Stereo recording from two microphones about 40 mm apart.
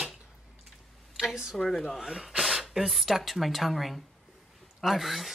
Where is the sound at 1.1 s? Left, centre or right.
Centre.